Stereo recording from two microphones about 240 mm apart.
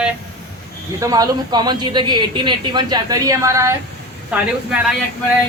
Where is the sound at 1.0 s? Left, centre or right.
Centre.